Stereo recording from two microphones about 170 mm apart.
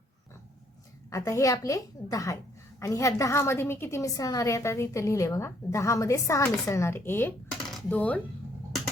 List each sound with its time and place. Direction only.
1.1 s a woman's voice: 20° left (ahead or behind)